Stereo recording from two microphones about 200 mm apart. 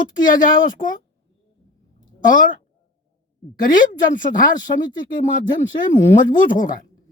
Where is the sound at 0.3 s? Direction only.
40° left (ahead or behind).